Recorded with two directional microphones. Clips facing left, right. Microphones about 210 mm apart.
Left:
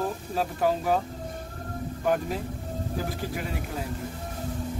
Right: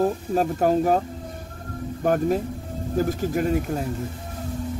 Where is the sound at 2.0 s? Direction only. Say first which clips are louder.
Right 6 dB; 45° right (ahead or behind).